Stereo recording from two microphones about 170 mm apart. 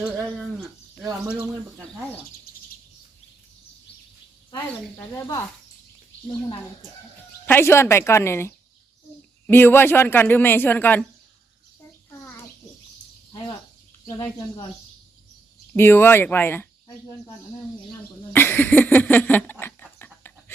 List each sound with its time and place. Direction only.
0.0 s speech: 5° left (ahead or behind)
2.5 s bird: 65° left (ahead or behind)
4.9 s speech: 20° left (ahead or behind)
7.4 s a woman's voice: 15° left (ahead or behind)
14.1 s speech: 25° left (ahead or behind)
15.7 s a woman's voice: 10° left (ahead or behind)
18.3 s a sound: 10° left (ahead or behind)